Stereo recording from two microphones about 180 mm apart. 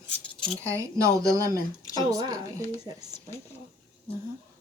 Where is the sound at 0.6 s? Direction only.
15° right (ahead or behind).